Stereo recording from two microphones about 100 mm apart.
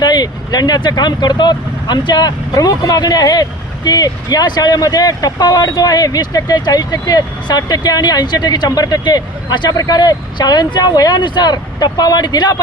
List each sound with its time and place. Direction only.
0.0 s speech: 45° left (ahead or behind)